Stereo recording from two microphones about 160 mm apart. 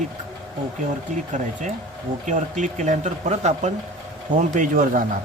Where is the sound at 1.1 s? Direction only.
50° right (ahead or behind).